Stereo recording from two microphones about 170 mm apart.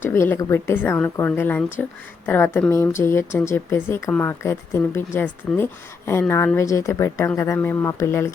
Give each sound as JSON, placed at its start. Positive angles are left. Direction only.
{"t": 0.1, "sound": "speech", "side_deg": 15}